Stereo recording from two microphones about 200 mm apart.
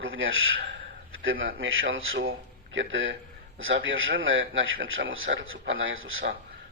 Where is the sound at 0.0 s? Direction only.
75° right (ahead or behind).